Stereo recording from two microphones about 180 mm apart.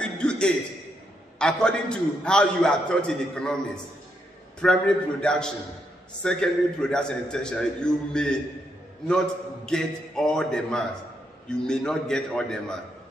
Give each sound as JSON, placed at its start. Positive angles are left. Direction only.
{"t": 0.0, "sound": "a sound", "side_deg": 5}
{"t": 1.4, "sound": "a man's voice", "side_deg": 5}
{"t": 9.7, "sound": "a man's voice", "side_deg": 5}